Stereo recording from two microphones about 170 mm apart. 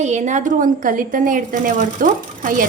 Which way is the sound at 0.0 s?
45° right (ahead or behind).